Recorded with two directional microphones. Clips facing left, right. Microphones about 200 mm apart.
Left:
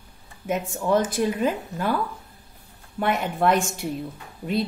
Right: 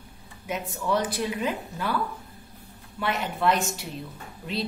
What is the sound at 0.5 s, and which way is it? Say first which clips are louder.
Speech: left 5 dB; 50° left (ahead or behind).